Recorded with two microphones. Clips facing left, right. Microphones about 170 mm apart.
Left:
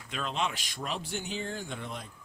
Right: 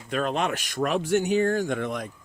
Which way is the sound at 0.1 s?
50° right (ahead or behind).